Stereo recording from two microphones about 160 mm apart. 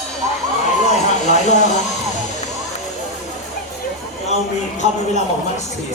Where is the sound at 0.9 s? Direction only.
45° left (ahead or behind).